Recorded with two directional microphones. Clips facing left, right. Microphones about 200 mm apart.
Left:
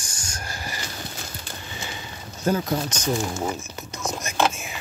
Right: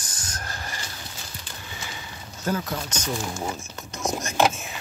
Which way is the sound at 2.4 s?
20° left (ahead or behind).